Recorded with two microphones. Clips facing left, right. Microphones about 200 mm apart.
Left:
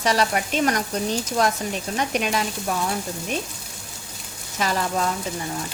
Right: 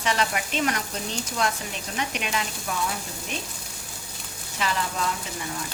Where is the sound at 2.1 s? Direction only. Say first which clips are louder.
Left 8 dB; 40° left (ahead or behind).